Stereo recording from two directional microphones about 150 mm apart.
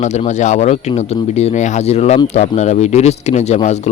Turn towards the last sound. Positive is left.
turn(degrees=50)  # may be behind; listen again after turning